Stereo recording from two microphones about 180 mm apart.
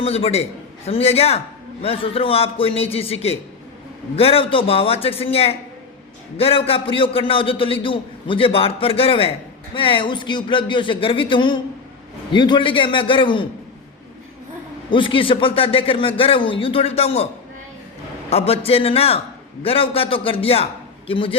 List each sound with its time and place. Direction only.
0.0 s a man's voice: 35° left (ahead or behind)
14.8 s a man's voice: 30° left (ahead or behind)
18.3 s a man's voice: 35° left (ahead or behind)